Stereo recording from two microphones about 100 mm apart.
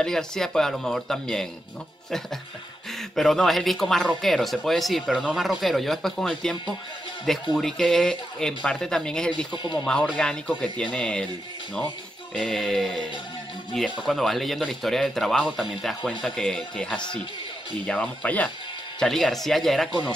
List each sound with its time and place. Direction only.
0.0 s a man's voice: 5° left (ahead or behind)
3.0 s a man's voice: 5° left (ahead or behind)
7.5 s speech: 5° left (ahead or behind)
9.5 s speech: 50° left (ahead or behind)
9.8 s speech: 10° left (ahead or behind)
12.4 s a man's voice: 5° left (ahead or behind)
14.0 s a man's voice: centre (ahead or behind)
18.9 s a man's voice: 5° left (ahead or behind)